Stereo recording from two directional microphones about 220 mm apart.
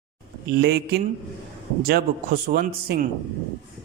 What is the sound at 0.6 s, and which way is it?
Speech, 45° right (ahead or behind).